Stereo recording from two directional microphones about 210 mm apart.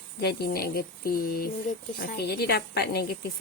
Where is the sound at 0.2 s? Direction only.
50° left (ahead or behind).